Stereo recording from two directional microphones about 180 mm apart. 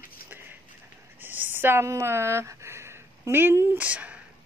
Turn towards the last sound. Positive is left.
turn(degrees=-5)  # may be behind; listen again after turning